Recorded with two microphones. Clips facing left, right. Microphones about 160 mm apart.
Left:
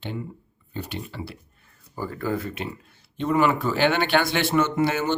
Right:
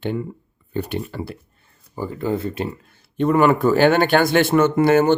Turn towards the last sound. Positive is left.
turn(degrees=-50)  # may be behind; listen again after turning